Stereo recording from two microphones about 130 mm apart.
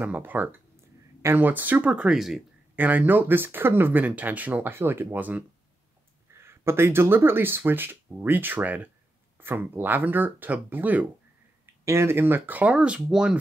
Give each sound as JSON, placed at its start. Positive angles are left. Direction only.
{"t": 0.0, "sound": "speech", "side_deg": -15}
{"t": 2.7, "sound": "speech", "side_deg": -15}